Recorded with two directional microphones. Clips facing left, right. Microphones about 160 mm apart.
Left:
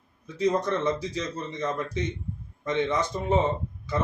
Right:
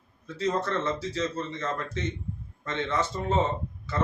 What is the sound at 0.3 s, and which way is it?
Speech, 15° left (ahead or behind).